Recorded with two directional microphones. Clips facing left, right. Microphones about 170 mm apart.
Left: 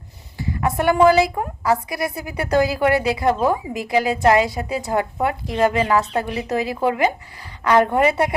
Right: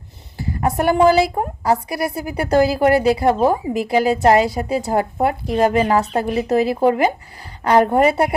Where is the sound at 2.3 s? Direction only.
40° right (ahead or behind).